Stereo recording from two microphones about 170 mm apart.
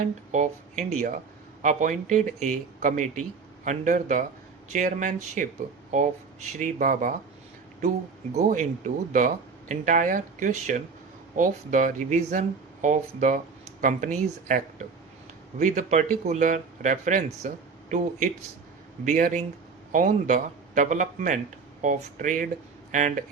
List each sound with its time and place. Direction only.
0.0 s speech: 45° right (ahead or behind)
6.6 s speech: 50° right (ahead or behind)
7.8 s speech: 40° right (ahead or behind)
19.0 s speech: 50° right (ahead or behind)